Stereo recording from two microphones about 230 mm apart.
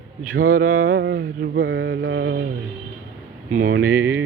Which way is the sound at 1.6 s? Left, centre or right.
Right.